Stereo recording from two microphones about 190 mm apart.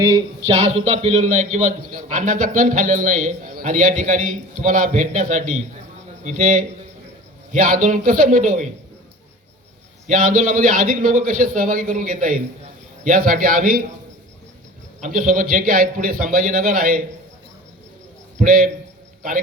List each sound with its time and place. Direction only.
0.0 s speech: 25° right (ahead or behind)
0.5 s a man's voice: 35° right (ahead or behind)
10.1 s a man's voice: 45° right (ahead or behind)
15.0 s a man's voice: 45° right (ahead or behind)
18.3 s a man's voice: 45° right (ahead or behind)